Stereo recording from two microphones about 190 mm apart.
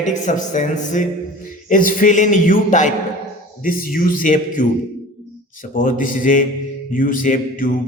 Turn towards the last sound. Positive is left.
turn(degrees=45)  # may be behind; listen again after turning